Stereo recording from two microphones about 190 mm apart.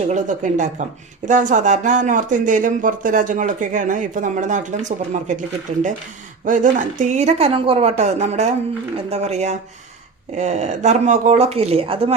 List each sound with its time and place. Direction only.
0.1 s speech: 40° right (ahead or behind)
6.4 s speech: 40° right (ahead or behind)